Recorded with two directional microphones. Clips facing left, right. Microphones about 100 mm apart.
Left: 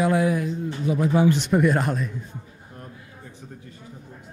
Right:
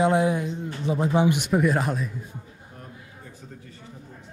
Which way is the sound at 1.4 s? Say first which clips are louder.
Left 2 dB; centre (ahead or behind).